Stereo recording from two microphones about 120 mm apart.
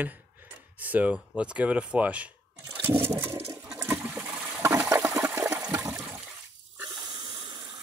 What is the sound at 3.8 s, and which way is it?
Toilet flush, 15° right (ahead or behind).